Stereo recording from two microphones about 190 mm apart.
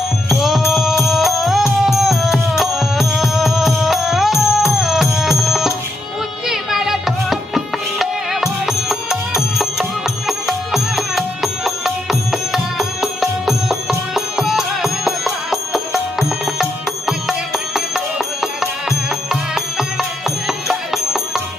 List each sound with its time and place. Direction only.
0.3 s music: centre (ahead or behind)
13.0 s music: centre (ahead or behind)
17.1 s music: centre (ahead or behind)